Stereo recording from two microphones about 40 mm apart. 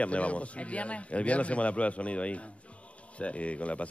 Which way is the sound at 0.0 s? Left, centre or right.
Left.